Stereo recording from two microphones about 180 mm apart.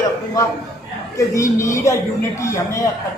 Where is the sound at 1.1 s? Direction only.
15° left (ahead or behind).